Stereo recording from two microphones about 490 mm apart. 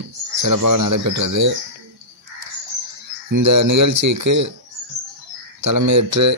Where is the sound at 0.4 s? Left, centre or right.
Right.